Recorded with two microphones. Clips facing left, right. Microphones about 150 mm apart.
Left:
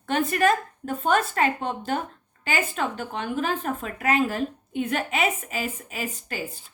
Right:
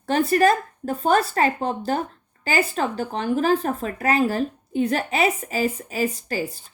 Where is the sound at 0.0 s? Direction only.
35° right (ahead or behind).